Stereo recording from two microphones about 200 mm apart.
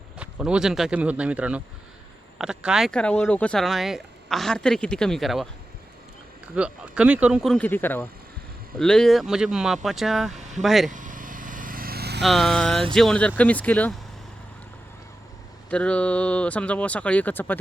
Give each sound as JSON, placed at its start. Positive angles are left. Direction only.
{"t": 0.2, "sound": "speech", "side_deg": -5}
{"t": 6.6, "sound": "speech", "side_deg": -5}
{"t": 10.9, "sound": "vehicle", "side_deg": -40}
{"t": 12.2, "sound": "speech", "side_deg": 0}
{"t": 15.7, "sound": "speech", "side_deg": 5}